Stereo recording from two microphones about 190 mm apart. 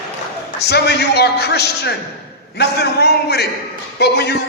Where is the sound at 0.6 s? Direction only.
60° left (ahead or behind).